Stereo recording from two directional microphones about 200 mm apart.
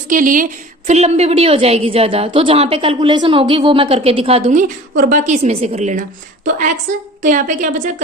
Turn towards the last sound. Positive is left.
turn(degrees=-40)  # may be behind; listen again after turning